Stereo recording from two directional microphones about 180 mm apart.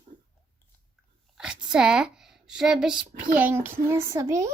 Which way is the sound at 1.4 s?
5° right (ahead or behind).